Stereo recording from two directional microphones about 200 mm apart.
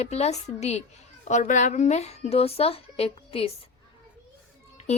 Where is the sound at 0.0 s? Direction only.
30° left (ahead or behind).